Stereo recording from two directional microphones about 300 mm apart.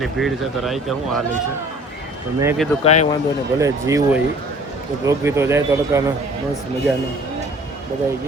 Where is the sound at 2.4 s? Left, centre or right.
Centre.